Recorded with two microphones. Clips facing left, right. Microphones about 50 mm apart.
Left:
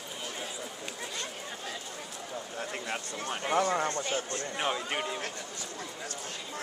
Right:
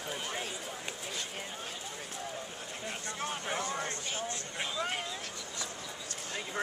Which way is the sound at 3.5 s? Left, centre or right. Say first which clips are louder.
Left 8 dB; left.